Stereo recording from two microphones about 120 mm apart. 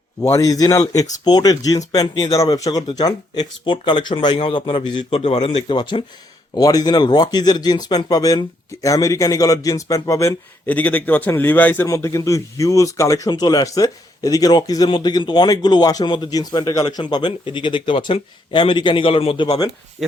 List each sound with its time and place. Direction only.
0.2 s speech: 25° left (ahead or behind)
10.7 s a man's voice: 15° left (ahead or behind)
11.9 s speech: 25° left (ahead or behind); by 19.5 s 55° left (ahead or behind)